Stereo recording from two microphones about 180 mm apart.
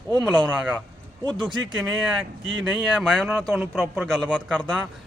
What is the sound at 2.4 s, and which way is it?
Speech, 90° right.